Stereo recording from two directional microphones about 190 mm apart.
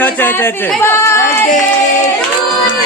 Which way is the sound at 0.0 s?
10° left (ahead or behind).